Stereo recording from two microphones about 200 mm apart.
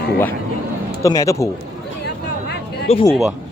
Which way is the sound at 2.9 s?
30° left (ahead or behind).